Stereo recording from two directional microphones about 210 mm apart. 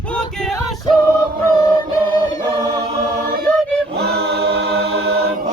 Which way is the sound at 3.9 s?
50° right (ahead or behind).